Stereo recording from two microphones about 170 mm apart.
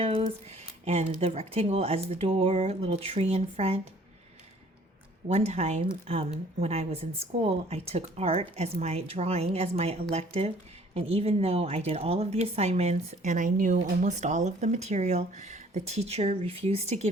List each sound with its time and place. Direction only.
0.0 s speech: 35° right (ahead or behind)
5.3 s speech: 40° right (ahead or behind)